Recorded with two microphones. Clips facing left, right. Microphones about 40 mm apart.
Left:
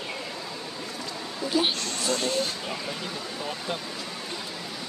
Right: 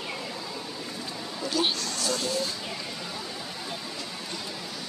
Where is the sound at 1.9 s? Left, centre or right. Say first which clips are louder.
Left 2 dB; left.